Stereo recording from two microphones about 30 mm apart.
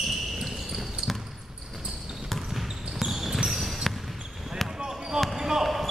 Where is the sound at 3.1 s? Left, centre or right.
Centre.